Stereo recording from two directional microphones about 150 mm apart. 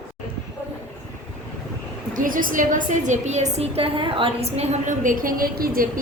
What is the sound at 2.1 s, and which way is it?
A woman's voice, 65° right (ahead or behind).